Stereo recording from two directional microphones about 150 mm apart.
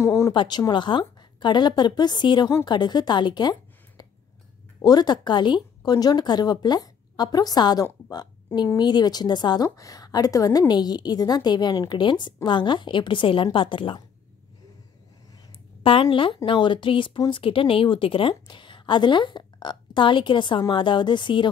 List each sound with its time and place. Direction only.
0.0 s a sound: 20° left (ahead or behind)
0.3 s speech: 30° left (ahead or behind)
4.8 s speech: 25° left (ahead or behind)
15.8 s speech: 35° left (ahead or behind)